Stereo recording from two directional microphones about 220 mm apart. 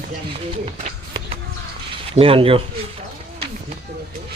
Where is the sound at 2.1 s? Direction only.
25° right (ahead or behind).